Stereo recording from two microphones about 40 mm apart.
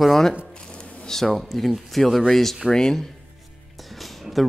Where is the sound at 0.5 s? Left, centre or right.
Centre.